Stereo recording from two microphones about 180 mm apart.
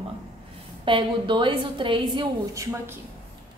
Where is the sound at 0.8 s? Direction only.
25° right (ahead or behind).